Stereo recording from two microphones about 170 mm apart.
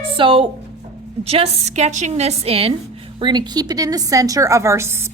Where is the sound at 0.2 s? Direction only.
30° right (ahead or behind).